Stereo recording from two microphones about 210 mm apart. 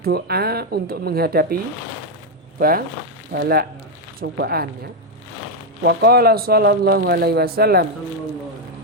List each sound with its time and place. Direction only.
0.0 s speech: 50° right (ahead or behind)
2.6 s speech: 45° right (ahead or behind)